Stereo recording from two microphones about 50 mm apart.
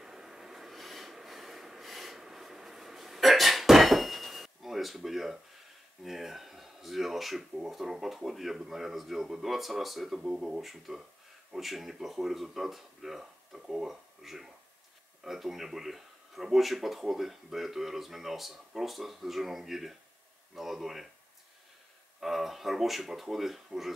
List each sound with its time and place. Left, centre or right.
0.0 s a sound: centre
6.0 s speech: centre
10.2 s speech: centre
10.6 s speech: centre
22.2 s speech: centre